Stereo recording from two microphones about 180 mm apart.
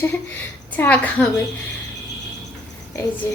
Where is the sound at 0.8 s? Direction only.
10° left (ahead or behind).